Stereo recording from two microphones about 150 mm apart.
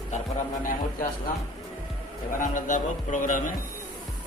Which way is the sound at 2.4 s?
60° left (ahead or behind).